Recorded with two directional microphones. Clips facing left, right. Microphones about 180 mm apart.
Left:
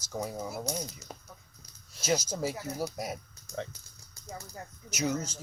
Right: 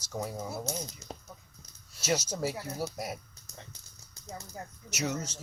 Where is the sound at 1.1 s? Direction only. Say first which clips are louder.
Right 2 dB; 30° right (ahead or behind).